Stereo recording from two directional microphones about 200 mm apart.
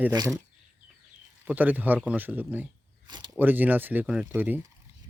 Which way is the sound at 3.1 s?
20° right (ahead or behind).